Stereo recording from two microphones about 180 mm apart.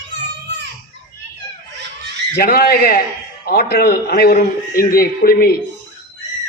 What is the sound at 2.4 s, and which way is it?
A man's voice, 55° left (ahead or behind).